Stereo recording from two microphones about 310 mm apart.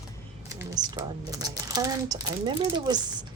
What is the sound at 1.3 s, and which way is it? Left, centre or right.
Speech, centre.